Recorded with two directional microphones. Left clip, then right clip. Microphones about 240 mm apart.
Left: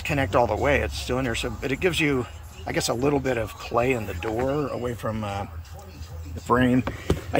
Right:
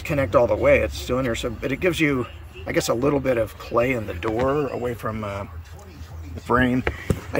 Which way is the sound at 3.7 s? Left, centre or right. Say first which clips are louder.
Right 2 dB; right.